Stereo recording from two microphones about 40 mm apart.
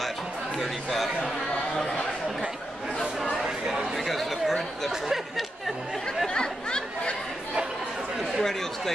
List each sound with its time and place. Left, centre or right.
0.6 s a sound: centre
3.4 s chatter: centre
6.2 s chatter: left
8.4 s chatter: centre